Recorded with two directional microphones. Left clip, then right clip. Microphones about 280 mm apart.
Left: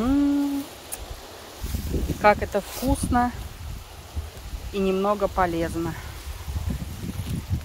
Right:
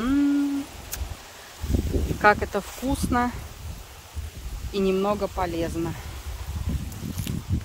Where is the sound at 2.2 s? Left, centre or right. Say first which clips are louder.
Left 1 dB; centre.